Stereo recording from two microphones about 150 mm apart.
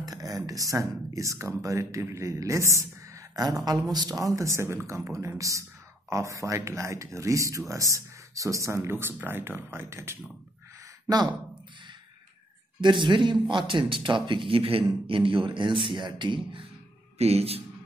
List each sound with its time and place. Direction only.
0.0 s speech: 25° right (ahead or behind)
12.8 s a man's voice: 30° right (ahead or behind)
17.2 s speech: 45° right (ahead or behind)